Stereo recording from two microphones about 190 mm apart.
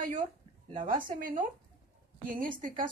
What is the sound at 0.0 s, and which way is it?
A woman's voice, 40° right (ahead or behind).